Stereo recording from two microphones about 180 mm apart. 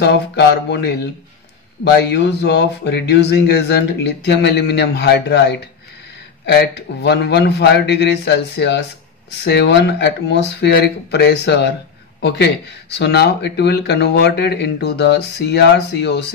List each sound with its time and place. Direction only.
0.0 s speech: 70° left (ahead or behind)